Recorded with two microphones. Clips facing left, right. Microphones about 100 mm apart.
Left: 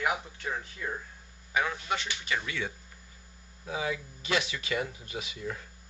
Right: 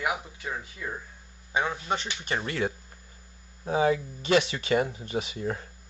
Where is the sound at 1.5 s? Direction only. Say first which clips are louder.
Right 2 dB; 25° right (ahead or behind).